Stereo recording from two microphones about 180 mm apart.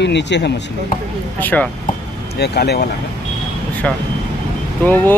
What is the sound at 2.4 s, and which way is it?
Speech, 65° left (ahead or behind).